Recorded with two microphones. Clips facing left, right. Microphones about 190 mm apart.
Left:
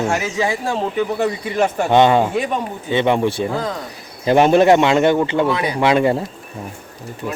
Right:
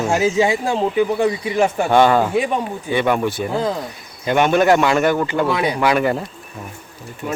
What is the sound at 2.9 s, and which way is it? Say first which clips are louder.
Speech: left 2 dB; 25° left (ahead or behind).